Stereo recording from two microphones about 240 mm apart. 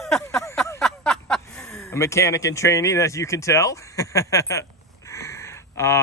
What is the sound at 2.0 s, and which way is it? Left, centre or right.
Speech, centre.